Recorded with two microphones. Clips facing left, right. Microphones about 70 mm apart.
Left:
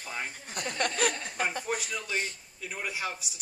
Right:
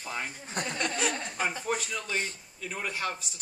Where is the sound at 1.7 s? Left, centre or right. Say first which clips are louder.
Right 1 dB; centre.